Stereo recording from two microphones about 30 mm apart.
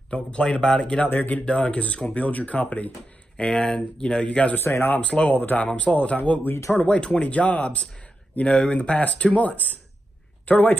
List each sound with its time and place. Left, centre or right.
0.5 s speech: left
1.1 s speech: left
1.4 s speech: left
2.2 s speech: left
3.5 s speech: left
4.5 s speech: left
5.3 s speech: left
5.6 s speech: left
10.4 s speech: left